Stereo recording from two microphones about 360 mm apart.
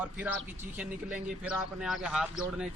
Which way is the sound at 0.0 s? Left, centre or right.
Centre.